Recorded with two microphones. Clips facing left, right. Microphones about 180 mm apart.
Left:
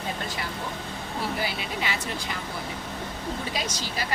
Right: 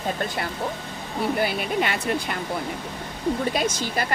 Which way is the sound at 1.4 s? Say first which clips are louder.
Right 7 dB; 55° right (ahead or behind).